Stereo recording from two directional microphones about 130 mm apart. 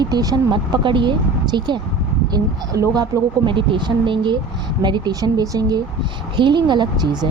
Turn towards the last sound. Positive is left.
turn(degrees=-30)  # may be behind; listen again after turning